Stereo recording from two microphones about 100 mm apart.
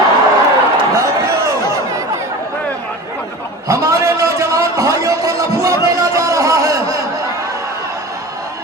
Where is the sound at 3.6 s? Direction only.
30° right (ahead or behind).